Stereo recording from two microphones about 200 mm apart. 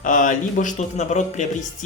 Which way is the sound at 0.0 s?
40° left (ahead or behind).